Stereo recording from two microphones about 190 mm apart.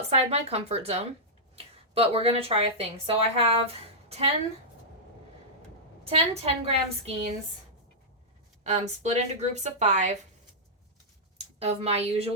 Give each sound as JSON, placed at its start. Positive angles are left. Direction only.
{"t": 0.1, "sound": "a woman's voice", "side_deg": -35}
{"t": 6.1, "sound": "a woman's voice", "side_deg": -30}
{"t": 8.6, "sound": "a woman's voice", "side_deg": -35}
{"t": 11.6, "sound": "a woman's voice", "side_deg": -35}